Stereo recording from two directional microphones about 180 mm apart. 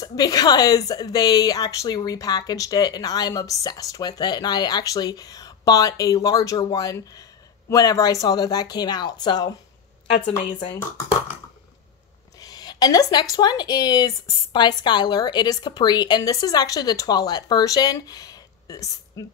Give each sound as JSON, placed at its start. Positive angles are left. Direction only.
{"t": 0.0, "sound": "a woman's voice", "side_deg": 20}
{"t": 12.4, "sound": "a woman's voice", "side_deg": 20}